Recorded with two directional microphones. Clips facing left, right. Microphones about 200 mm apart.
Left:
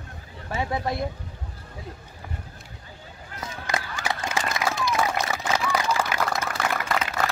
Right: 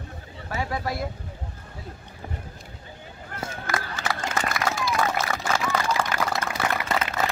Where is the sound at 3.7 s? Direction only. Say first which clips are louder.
Left 1 dB; 15° left (ahead or behind).